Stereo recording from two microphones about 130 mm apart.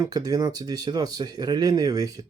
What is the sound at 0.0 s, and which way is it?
Speech, 30° right (ahead or behind).